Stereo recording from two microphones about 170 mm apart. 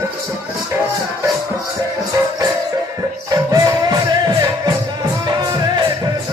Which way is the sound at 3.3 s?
20° right (ahead or behind).